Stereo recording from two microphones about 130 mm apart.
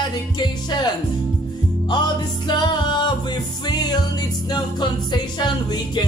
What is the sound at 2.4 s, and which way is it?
Music, 35° left (ahead or behind).